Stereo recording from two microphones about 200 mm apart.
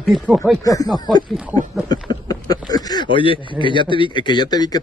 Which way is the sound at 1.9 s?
20° left (ahead or behind).